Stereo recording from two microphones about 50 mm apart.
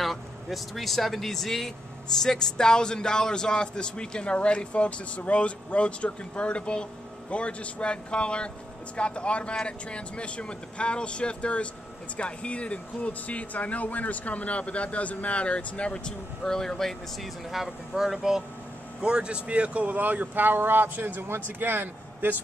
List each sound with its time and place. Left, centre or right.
0.0 s a man's voice: centre
17.2 s speech: centre; by 22.4 s right